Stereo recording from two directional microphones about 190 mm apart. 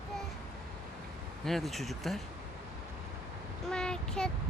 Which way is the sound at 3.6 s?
5° left (ahead or behind).